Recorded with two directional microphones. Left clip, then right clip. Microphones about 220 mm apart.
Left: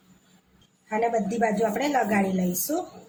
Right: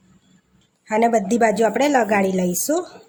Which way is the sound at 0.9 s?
50° right (ahead or behind).